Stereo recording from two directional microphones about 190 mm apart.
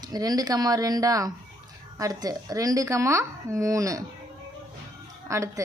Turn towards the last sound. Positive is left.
turn(degrees=-15)  # may be behind; listen again after turning